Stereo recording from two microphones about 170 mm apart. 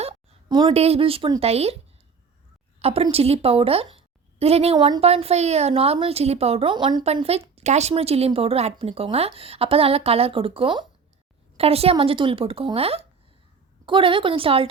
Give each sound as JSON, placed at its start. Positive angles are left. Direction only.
{"t": 0.4, "sound": "a woman's voice", "side_deg": -25}
{"t": 0.7, "sound": "a woman's voice", "side_deg": -35}
{"t": 2.8, "sound": "a woman's voice", "side_deg": -35}